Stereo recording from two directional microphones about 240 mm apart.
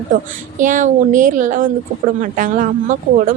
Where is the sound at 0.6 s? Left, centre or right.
Right.